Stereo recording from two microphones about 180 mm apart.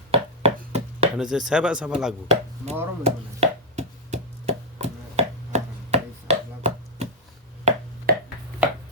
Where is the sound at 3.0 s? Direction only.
35° right (ahead or behind).